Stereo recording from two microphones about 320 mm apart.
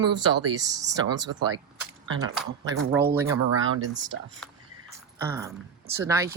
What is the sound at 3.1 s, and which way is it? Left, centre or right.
Speech, centre.